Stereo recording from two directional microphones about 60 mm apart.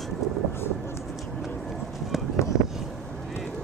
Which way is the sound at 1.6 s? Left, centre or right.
Centre.